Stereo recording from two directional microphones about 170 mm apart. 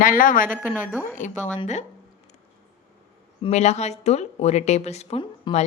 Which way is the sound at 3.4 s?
40° left (ahead or behind).